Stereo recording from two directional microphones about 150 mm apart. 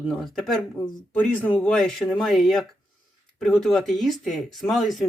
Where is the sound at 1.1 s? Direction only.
10° left (ahead or behind).